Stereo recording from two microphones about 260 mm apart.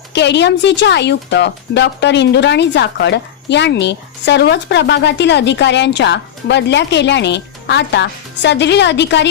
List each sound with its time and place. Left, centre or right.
0.1 s speech: left